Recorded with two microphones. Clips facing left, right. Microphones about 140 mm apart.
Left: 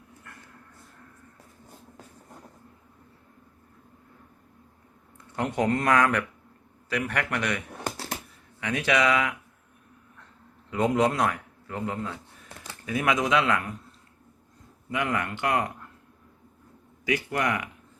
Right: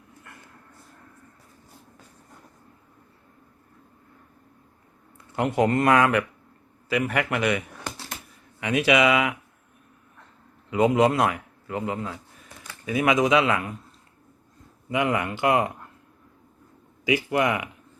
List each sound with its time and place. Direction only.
5.4 s a man's voice: 5° right (ahead or behind)
7.8 s a sound: 30° left (ahead or behind)
8.6 s speech: 10° right (ahead or behind)
10.7 s a man's voice: 5° right (ahead or behind)
14.8 s speech: 10° right (ahead or behind)
17.1 s speech: 10° right (ahead or behind)